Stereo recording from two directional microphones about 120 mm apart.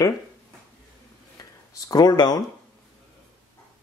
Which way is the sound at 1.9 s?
35° left (ahead or behind).